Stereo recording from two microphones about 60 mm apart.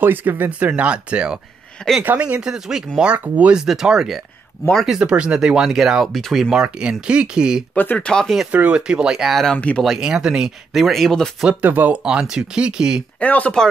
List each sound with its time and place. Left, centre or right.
0.0 s speech: right
3.6 s speech: centre
6.2 s speech: centre
6.5 s speech: centre
7.7 s speech: left
8.0 s speech: centre
8.5 s speech: right
9.3 s speech: centre
9.6 s speech: left
9.8 s speech: centre
11.6 s speech: right
12.0 s speech: centre
13.2 s speech: left